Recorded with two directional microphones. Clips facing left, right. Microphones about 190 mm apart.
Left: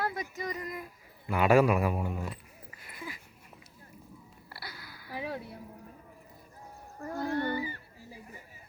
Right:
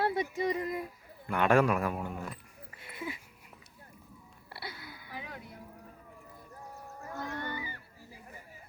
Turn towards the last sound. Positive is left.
turn(degrees=35)  # may be behind; listen again after turning